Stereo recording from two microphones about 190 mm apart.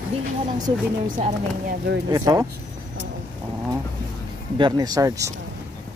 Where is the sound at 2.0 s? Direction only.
20° right (ahead or behind).